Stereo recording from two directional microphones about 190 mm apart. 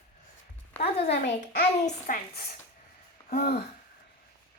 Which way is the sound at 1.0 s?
60° left (ahead or behind).